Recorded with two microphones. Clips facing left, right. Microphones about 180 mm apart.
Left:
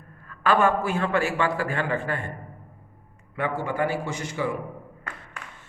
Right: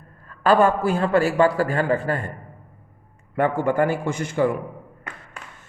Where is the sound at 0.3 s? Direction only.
35° right (ahead or behind).